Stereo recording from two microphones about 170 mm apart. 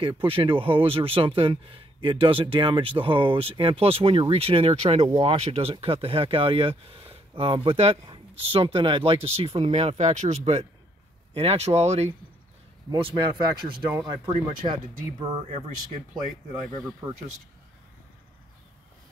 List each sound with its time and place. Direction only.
0.0 s speech: 30° right (ahead or behind)
12.9 s speech: 25° right (ahead or behind)